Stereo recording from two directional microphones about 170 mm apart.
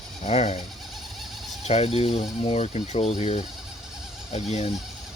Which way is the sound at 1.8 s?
35° left (ahead or behind).